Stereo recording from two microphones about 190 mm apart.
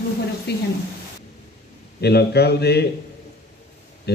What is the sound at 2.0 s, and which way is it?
Speech, 60° left (ahead or behind).